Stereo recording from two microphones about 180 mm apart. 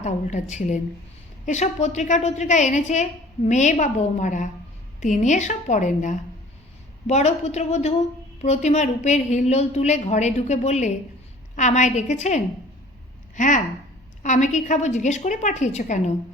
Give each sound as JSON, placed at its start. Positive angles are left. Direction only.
{"t": 0.0, "sound": "a woman's voice", "side_deg": 40}